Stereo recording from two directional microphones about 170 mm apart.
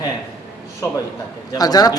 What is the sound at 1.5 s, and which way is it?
Speech, 20° left (ahead or behind).